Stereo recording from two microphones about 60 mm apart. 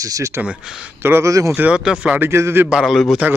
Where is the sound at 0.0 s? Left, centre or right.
Right.